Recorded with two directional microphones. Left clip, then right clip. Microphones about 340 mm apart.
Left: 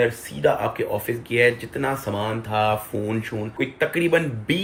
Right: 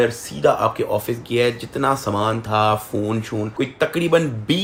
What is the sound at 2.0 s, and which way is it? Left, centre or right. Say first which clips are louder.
Speech: right 5 dB; right.